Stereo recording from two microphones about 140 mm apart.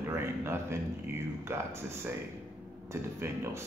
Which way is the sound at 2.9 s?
20° right (ahead or behind).